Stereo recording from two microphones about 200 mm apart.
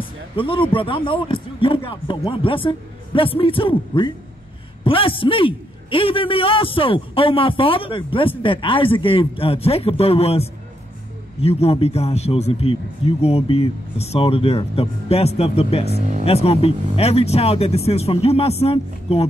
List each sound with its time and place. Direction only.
0.4 s a man's voice: 25° left (ahead or behind)